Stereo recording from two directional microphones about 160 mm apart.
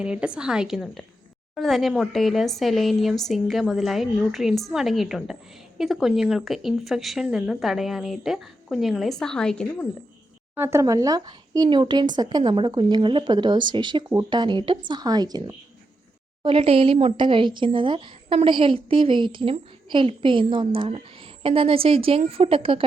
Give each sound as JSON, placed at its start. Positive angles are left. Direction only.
{"t": 0.0, "sound": "speech", "side_deg": -5}
{"t": 10.5, "sound": "speech", "side_deg": -15}